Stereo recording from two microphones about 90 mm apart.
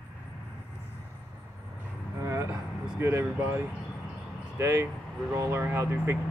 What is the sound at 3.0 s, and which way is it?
Speech, 30° right (ahead or behind).